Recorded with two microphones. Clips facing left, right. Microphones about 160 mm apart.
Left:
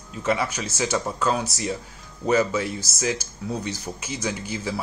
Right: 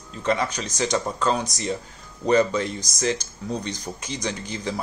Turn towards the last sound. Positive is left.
turn(degrees=5)  # may be behind; listen again after turning